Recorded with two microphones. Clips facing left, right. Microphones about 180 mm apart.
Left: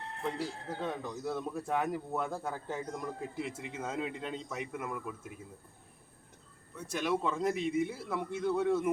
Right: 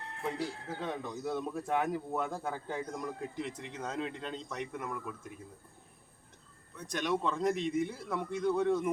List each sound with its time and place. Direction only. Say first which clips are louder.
0.8 s speech: left 1 dB; centre (ahead or behind)
6.7 s speech: left 1 dB; 5° left (ahead or behind)